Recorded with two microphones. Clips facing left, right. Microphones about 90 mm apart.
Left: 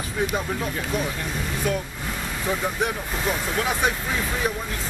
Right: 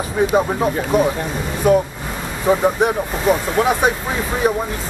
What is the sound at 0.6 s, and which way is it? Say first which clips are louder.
Speech: right 10 dB; 35° right (ahead or behind).